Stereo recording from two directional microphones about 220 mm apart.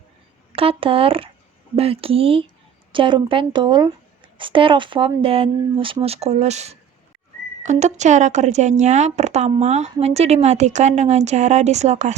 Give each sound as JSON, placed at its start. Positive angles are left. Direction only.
{"t": 0.5, "sound": "speech", "side_deg": -25}